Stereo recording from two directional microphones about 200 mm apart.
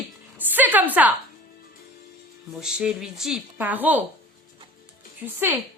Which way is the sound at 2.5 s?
5° right (ahead or behind).